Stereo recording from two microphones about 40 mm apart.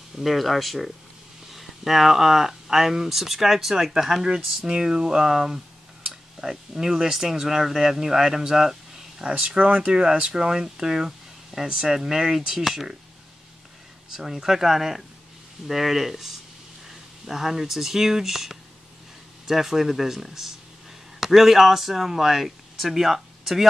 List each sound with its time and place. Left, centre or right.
0.2 s speech: centre
9.2 s speech: right
10.3 s speech: centre
14.1 s speech: centre